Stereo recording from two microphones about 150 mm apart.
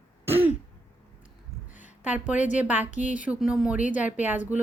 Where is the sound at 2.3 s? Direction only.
55° left (ahead or behind).